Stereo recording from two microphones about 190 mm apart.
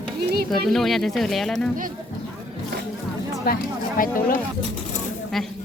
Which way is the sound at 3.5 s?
55° left (ahead or behind).